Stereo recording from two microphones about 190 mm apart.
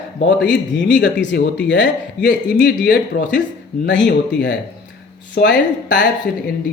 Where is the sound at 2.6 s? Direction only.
45° left (ahead or behind).